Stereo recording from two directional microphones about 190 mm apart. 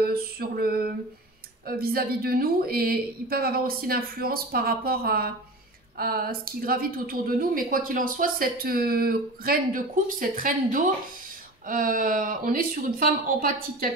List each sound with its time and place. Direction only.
0.0 s mantra: 55° right (ahead or behind)
1.7 s a woman's voice: 55° right (ahead or behind)